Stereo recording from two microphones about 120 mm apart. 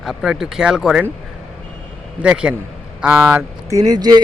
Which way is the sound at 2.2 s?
10° right (ahead or behind).